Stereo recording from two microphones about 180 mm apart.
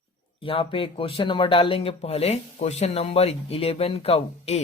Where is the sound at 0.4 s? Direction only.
30° left (ahead or behind).